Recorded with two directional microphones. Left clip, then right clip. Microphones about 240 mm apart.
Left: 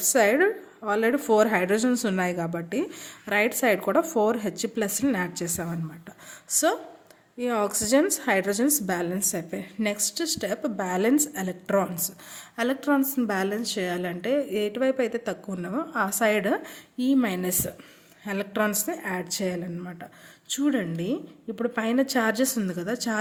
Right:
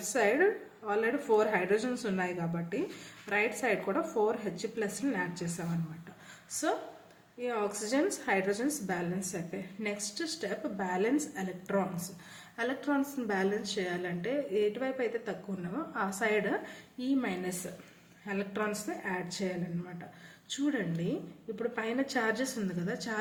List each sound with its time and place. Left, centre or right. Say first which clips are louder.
0.1 s a woman's voice: left 7 dB; left
7.3 s a woman's voice: left 8 dB; left